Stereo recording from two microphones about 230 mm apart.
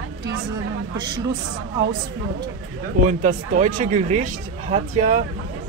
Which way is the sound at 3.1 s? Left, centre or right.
Right.